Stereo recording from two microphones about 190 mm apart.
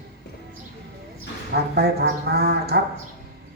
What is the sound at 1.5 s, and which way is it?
Speech, 60° right (ahead or behind).